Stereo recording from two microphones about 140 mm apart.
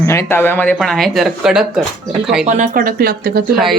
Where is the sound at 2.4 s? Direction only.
60° right (ahead or behind); by 3.4 s 90° right.